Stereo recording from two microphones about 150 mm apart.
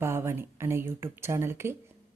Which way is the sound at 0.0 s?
15° right (ahead or behind).